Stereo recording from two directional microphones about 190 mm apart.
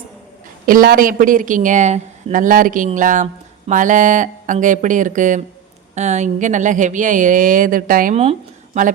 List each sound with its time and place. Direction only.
0.6 s speech: 50° right (ahead or behind)
8.1 s speech: 30° right (ahead or behind)